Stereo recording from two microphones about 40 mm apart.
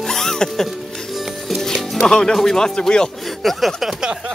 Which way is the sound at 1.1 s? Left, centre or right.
Centre.